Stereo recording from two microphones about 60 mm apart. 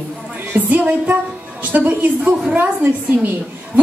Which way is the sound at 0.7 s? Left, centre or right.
Right.